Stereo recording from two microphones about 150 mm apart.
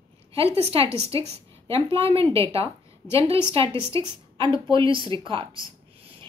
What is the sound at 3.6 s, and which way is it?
Speech, 20° left (ahead or behind).